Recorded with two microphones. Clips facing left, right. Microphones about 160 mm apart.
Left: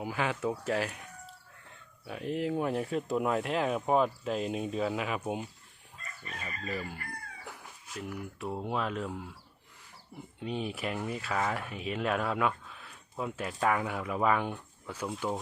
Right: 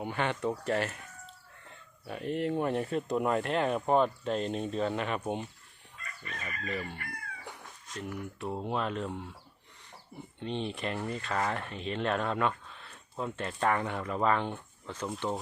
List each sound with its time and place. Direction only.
0.0 s speech: centre (ahead or behind)
6.4 s chicken: 30° left (ahead or behind)
6.7 s speech: 5° left (ahead or behind)
10.4 s speech: 5° left (ahead or behind)